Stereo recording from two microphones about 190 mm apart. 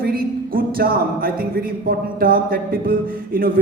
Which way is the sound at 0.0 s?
50° right (ahead or behind).